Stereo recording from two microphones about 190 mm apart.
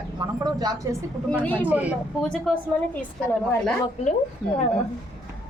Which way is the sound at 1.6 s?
10° right (ahead or behind).